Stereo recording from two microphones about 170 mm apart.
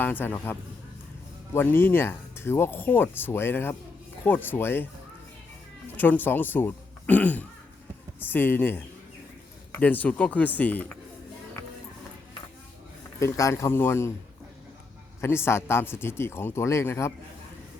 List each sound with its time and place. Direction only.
0.0 s speech: 10° left (ahead or behind)
1.5 s speech: 15° left (ahead or behind)
6.0 s speech: 10° left (ahead or behind)
13.1 s speech: 20° left (ahead or behind)
15.2 s speech: 15° left (ahead or behind)